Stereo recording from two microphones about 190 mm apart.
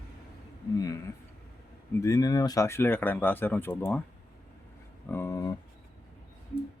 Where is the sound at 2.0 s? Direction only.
20° left (ahead or behind).